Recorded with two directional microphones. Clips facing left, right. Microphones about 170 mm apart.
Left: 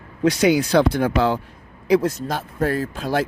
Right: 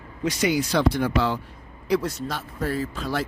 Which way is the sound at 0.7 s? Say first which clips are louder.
Left 4 dB; 50° left (ahead or behind).